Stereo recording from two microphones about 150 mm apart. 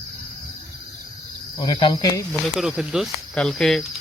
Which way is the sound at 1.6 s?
30° left (ahead or behind).